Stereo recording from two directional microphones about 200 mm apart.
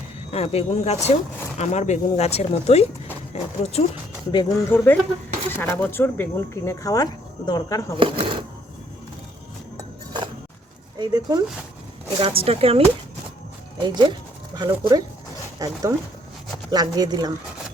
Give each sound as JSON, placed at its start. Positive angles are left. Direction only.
{"t": 0.3, "sound": "speech", "side_deg": 30}
{"t": 4.3, "sound": "speech", "side_deg": 20}
{"t": 7.9, "sound": "speech", "side_deg": -25}
{"t": 9.7, "sound": "a sound", "side_deg": -20}
{"t": 10.9, "sound": "speech", "side_deg": -20}
{"t": 13.8, "sound": "speech", "side_deg": -20}